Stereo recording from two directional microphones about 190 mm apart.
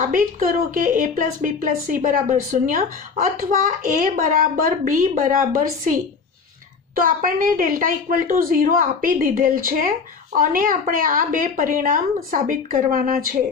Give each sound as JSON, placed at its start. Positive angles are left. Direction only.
{"t": 0.1, "sound": "a woman's voice", "side_deg": -45}
{"t": 7.0, "sound": "a woman's voice", "side_deg": -45}